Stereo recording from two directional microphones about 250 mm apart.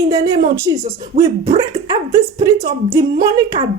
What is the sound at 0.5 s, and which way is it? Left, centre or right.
Speech, centre.